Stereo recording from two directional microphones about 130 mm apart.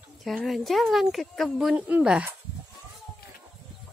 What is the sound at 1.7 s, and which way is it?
Speech, 15° right (ahead or behind).